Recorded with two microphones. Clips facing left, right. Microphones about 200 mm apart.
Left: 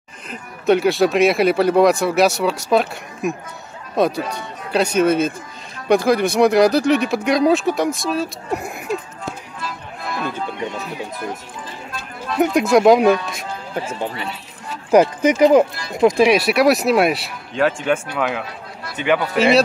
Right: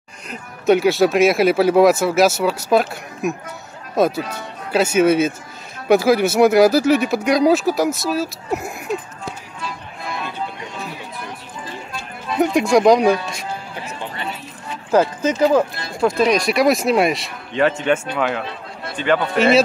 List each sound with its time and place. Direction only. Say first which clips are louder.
0.3 s speech: right 1 dB; centre (ahead or behind)
12.3 s speech: even; centre (ahead or behind)
14.9 s speech: left 3 dB; 15° left (ahead or behind); by 18.4 s centre (ahead or behind)
19.0 s speech: even; 15° left (ahead or behind)
19.3 s speech: even; centre (ahead or behind)